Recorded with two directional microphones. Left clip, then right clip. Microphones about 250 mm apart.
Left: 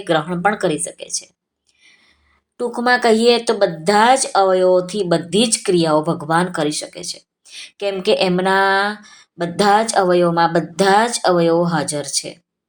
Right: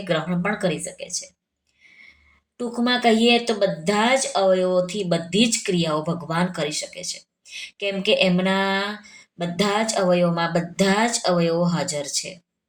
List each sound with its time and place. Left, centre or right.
0.0 s a woman's voice: left
2.6 s a woman's voice: left